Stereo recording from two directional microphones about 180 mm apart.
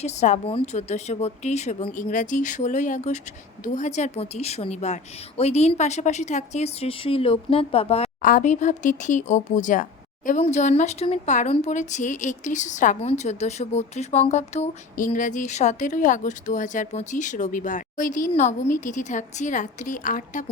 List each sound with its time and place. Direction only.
0.0 s a woman's voice: 40° left (ahead or behind)
8.2 s a woman's voice: 45° left (ahead or behind)